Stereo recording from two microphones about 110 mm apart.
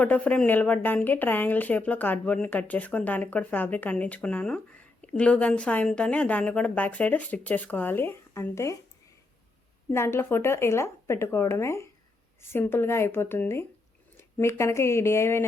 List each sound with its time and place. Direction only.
0.0 s a woman's voice: 15° left (ahead or behind)
9.9 s speech: 25° left (ahead or behind)